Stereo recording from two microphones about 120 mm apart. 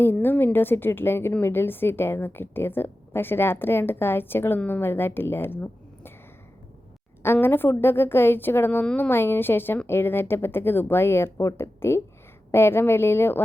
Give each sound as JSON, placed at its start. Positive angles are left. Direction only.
{"t": 0.0, "sound": "a woman's voice", "side_deg": 15}
{"t": 7.3, "sound": "a woman's voice", "side_deg": 20}